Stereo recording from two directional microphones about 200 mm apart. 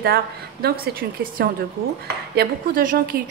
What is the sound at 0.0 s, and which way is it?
A woman's voice, 50° right (ahead or behind).